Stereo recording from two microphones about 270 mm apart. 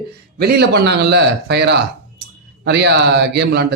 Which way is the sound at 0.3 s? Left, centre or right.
Right.